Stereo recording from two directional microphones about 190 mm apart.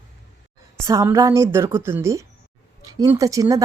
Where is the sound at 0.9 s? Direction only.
15° right (ahead or behind).